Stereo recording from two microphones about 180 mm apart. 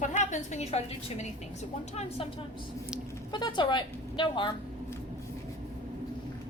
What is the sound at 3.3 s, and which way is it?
A woman's voice, 25° left (ahead or behind).